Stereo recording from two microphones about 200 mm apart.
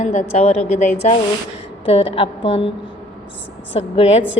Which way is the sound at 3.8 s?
30° left (ahead or behind).